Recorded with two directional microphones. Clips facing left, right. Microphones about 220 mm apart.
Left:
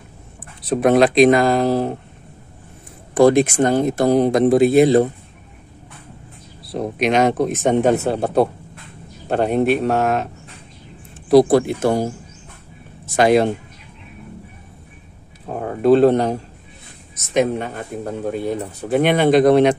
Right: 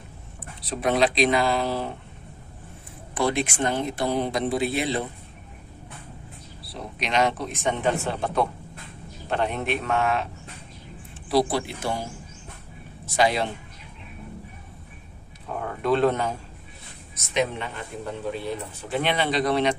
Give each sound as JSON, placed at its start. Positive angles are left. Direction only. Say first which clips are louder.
{"t": 0.7, "sound": "speech", "louder": "left 9 dB", "side_deg": 50}
{"t": 3.2, "sound": "speech", "louder": "left 12 dB", "side_deg": 45}
{"t": 6.6, "sound": "speech", "louder": "left 13 dB", "side_deg": 45}
{"t": 15.4, "sound": "a sound", "louder": "left 10 dB", "side_deg": 35}
{"t": 17.1, "sound": "speech", "louder": "left 8 dB", "side_deg": 45}